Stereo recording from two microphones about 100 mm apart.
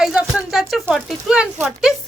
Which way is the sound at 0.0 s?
5° right (ahead or behind).